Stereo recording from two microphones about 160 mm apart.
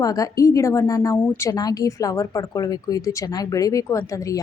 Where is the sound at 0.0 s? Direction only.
20° left (ahead or behind).